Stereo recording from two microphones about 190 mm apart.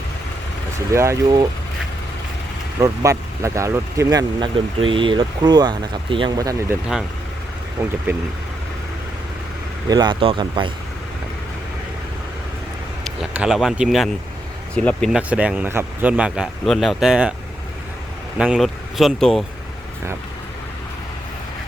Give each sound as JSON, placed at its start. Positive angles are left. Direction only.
{"t": 0.9, "sound": "speech", "side_deg": -15}
{"t": 2.8, "sound": "speech", "side_deg": -15}
{"t": 7.8, "sound": "speech", "side_deg": -15}
{"t": 9.9, "sound": "speech", "side_deg": -25}
{"t": 13.3, "sound": "speech", "side_deg": -5}
{"t": 15.3, "sound": "speech", "side_deg": -5}
{"t": 18.3, "sound": "speech", "side_deg": -5}